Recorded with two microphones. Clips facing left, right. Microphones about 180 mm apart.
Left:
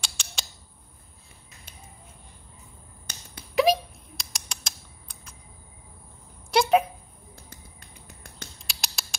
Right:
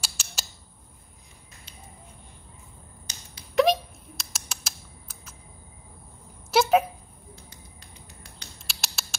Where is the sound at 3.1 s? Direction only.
60° left (ahead or behind).